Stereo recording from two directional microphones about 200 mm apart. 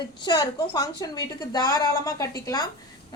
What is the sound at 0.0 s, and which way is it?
Speech, 25° left (ahead or behind).